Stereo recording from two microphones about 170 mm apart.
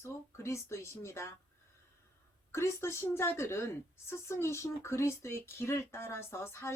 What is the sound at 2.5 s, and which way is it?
A woman's voice, 15° left (ahead or behind).